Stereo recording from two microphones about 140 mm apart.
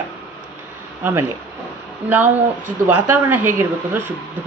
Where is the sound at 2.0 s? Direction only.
10° right (ahead or behind).